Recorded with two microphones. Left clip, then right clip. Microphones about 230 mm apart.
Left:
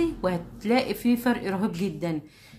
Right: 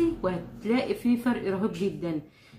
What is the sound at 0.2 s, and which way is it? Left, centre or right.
A woman's voice, left.